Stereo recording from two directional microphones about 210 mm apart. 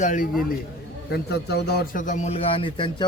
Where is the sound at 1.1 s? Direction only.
50° left (ahead or behind); by 2.9 s 25° left (ahead or behind).